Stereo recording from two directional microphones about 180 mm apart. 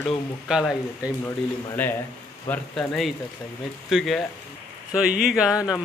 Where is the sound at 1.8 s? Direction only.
10° left (ahead or behind).